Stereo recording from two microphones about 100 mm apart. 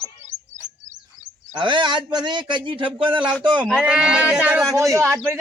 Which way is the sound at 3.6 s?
10° right (ahead or behind).